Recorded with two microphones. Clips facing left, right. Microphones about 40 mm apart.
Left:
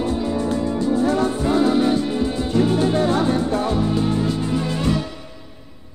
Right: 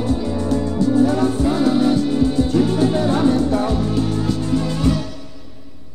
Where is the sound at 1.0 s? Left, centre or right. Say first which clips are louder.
Right 2 dB; left.